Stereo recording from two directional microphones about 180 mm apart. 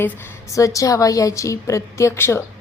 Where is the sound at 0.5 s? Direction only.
15° left (ahead or behind).